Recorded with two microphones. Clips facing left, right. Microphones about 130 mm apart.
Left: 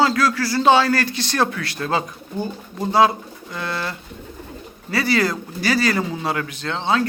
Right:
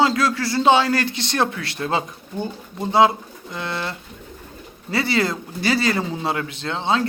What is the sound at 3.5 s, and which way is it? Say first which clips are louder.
Speech: left 1 dB; 20° right (ahead or behind).